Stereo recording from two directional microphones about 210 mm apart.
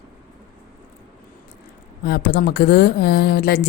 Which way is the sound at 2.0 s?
50° left (ahead or behind).